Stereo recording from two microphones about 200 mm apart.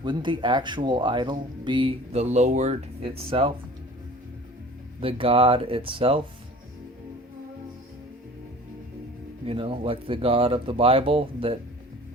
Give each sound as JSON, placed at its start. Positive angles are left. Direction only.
{"t": 0.0, "sound": "speech", "side_deg": -25}
{"t": 4.9, "sound": "speech", "side_deg": -25}
{"t": 9.5, "sound": "speech", "side_deg": -25}